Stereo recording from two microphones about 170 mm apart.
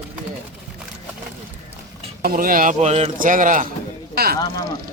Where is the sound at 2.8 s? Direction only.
40° right (ahead or behind).